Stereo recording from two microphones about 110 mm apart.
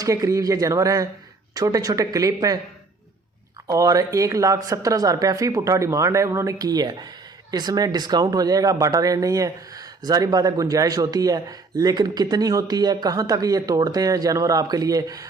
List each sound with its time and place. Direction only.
0.0 s speech: 30° right (ahead or behind)
3.7 s speech: 30° right (ahead or behind)